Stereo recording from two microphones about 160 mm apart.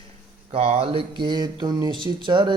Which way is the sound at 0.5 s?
40° right (ahead or behind).